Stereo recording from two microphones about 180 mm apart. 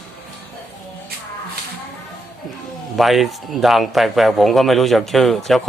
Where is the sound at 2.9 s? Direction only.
Centre (ahead or behind).